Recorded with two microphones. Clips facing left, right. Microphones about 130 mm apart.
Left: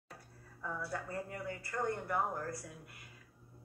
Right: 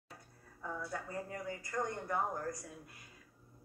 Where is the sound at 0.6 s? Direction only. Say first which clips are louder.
Left 1 dB; 20° right (ahead or behind).